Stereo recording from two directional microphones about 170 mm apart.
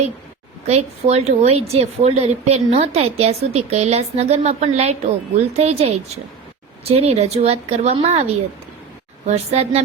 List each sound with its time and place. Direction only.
0.7 s a woman's voice: 40° right (ahead or behind)